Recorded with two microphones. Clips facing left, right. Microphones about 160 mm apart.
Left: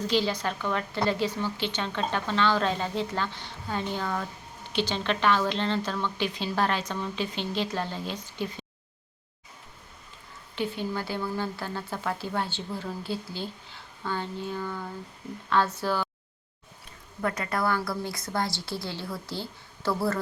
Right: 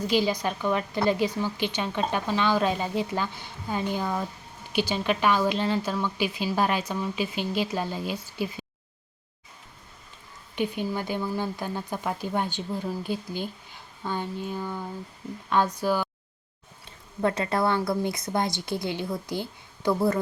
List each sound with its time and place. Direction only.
0.1 s a woman's voice: 10° right (ahead or behind)
10.5 s a woman's voice: 15° right (ahead or behind)
17.2 s a woman's voice: 25° right (ahead or behind)